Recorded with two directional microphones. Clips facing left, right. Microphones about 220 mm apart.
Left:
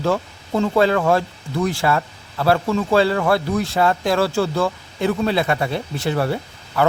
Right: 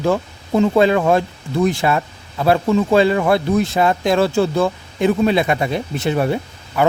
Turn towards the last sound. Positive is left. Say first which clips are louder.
# right 2 dB
turn(degrees=-15)  # may be behind; listen again after turning